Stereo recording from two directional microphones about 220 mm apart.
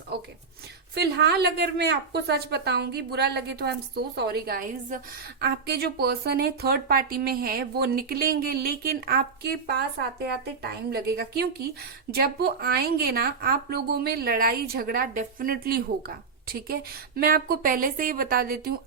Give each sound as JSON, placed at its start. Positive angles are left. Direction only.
{"t": 0.9, "sound": "a woman's voice", "side_deg": -45}